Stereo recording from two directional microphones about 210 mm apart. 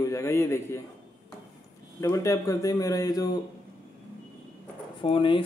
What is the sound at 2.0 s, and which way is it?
A man's voice, 15° left (ahead or behind).